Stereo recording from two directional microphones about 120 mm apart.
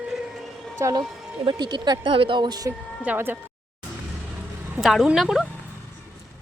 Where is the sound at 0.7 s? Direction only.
30° right (ahead or behind).